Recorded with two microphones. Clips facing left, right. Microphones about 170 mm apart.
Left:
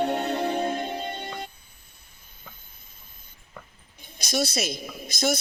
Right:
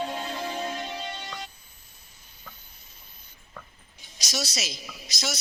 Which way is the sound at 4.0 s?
55° left (ahead or behind).